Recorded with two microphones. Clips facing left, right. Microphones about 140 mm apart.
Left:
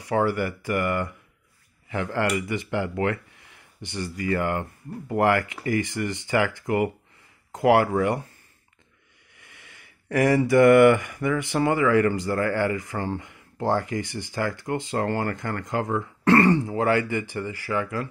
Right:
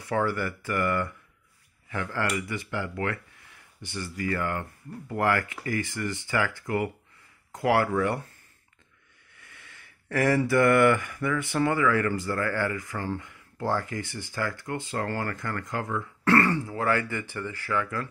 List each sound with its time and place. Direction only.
0.0 s speech: 15° left (ahead or behind)
9.3 s speech: 15° left (ahead or behind)